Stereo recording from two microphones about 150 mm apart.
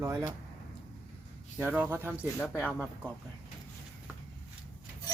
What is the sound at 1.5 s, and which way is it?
A man's voice, 10° right (ahead or behind).